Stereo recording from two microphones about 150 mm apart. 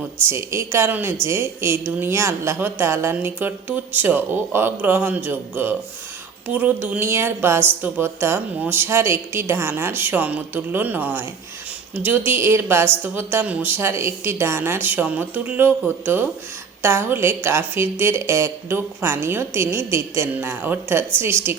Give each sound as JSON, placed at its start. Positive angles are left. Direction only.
{"t": 0.2, "sound": "a woman's voice", "side_deg": -15}